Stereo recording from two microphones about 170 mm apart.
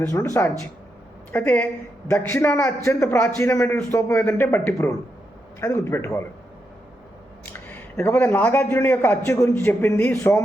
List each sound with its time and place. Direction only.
0.0 s a man's voice: 15° left (ahead or behind)
7.4 s a man's voice: 15° left (ahead or behind)